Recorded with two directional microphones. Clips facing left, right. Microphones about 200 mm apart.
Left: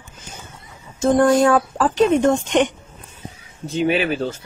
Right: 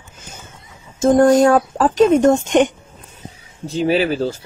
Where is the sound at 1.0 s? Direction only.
45° right (ahead or behind).